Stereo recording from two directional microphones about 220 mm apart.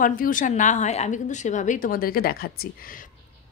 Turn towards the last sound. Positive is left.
turn(degrees=40)  # may be behind; listen again after turning